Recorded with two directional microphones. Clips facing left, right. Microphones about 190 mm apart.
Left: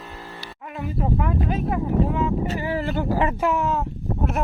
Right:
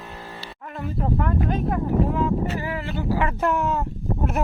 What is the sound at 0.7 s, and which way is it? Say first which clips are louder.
Speech: even; 5° left (ahead or behind).